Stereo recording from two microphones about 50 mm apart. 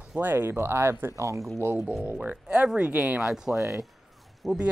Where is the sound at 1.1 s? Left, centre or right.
Right.